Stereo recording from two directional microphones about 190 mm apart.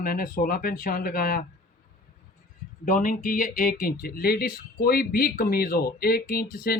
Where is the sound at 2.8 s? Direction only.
45° left (ahead or behind).